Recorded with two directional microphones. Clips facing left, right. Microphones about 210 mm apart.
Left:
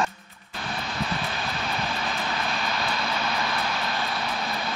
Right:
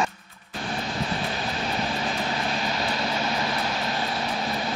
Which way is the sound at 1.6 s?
20° right (ahead or behind).